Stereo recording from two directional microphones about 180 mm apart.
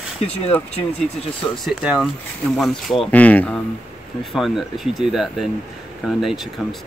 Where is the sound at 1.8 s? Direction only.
5° right (ahead or behind).